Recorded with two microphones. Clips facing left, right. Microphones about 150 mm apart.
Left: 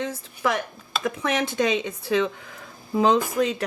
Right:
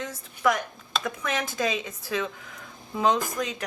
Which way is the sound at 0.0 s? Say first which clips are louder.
Even; 30° left (ahead or behind).